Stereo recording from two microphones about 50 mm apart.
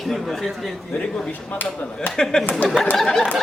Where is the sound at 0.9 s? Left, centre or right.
Centre.